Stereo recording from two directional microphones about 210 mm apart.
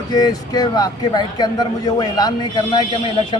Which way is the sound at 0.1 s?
20° left (ahead or behind).